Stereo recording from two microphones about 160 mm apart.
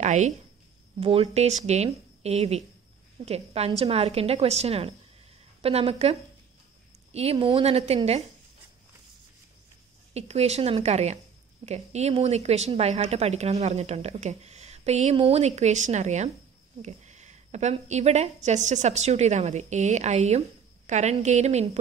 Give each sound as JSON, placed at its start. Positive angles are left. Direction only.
{"t": 0.0, "sound": "a woman's voice", "side_deg": -45}
{"t": 7.3, "sound": "a woman's voice", "side_deg": -30}
{"t": 7.6, "sound": "a woman's voice", "side_deg": -40}
{"t": 10.1, "sound": "a woman's voice", "side_deg": -40}